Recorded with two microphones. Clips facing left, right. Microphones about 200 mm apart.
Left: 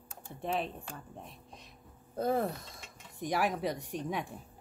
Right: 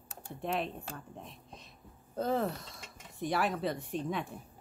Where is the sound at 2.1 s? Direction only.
10° left (ahead or behind).